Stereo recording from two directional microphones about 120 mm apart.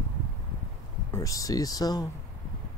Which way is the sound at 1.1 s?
30° left (ahead or behind).